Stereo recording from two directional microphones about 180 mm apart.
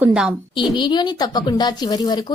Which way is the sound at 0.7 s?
25° left (ahead or behind).